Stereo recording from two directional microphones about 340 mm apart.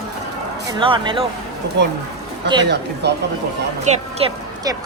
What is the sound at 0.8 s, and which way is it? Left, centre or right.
Speech, centre.